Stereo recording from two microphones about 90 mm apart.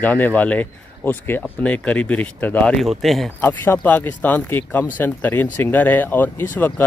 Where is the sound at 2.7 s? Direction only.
Centre (ahead or behind).